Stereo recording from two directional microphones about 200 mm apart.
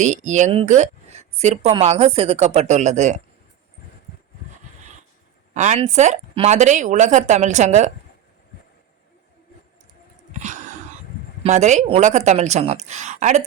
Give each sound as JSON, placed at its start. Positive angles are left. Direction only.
{"t": 0.0, "sound": "a woman's voice", "side_deg": -35}
{"t": 5.5, "sound": "a woman's voice", "side_deg": -35}
{"t": 11.4, "sound": "a woman's voice", "side_deg": -35}